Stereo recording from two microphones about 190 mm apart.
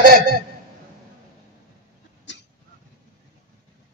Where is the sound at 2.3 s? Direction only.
70° left (ahead or behind).